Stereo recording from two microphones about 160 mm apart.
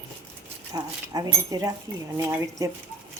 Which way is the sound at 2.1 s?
20° right (ahead or behind).